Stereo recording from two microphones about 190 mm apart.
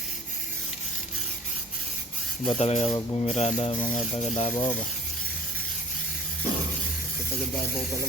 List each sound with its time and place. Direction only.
2.5 s speech: 35° left (ahead or behind)
3.8 s speech: 5° left (ahead or behind)
4.4 s speech: 30° left (ahead or behind)